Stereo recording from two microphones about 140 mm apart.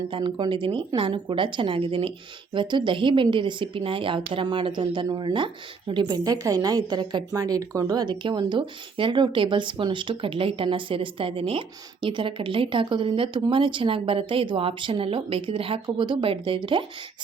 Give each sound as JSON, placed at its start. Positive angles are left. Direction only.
{"t": 0.1, "sound": "a woman's voice", "side_deg": -35}